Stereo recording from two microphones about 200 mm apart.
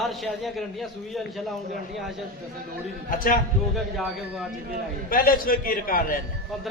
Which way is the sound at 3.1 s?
45° left (ahead or behind).